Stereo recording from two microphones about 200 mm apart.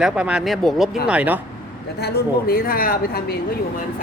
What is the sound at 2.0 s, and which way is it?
A woman's voice, 50° left (ahead or behind).